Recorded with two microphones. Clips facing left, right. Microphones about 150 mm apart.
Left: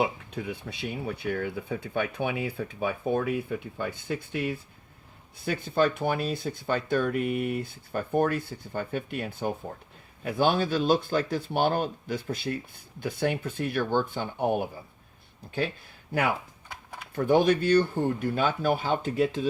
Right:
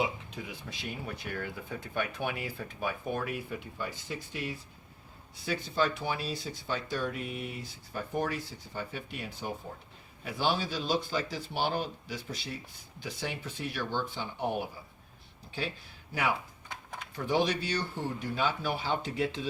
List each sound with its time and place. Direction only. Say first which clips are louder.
0.0 s speech: left 5 dB; 60° left (ahead or behind)
17.2 s speech: left 7 dB; 55° left (ahead or behind)